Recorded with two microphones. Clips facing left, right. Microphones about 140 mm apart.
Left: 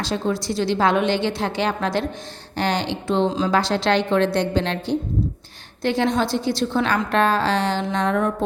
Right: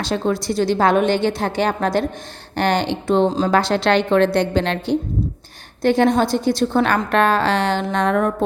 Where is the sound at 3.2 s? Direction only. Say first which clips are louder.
Right 3 dB; 35° right (ahead or behind).